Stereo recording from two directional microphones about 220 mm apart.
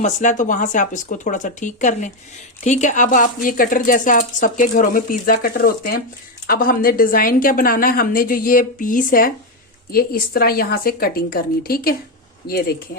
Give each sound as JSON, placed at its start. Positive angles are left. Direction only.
{"t": 0.0, "sound": "a woman's voice", "side_deg": 35}